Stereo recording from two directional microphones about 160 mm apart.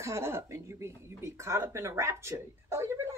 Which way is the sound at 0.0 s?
15° right (ahead or behind).